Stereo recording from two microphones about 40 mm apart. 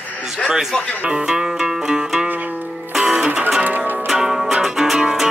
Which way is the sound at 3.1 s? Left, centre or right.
Right.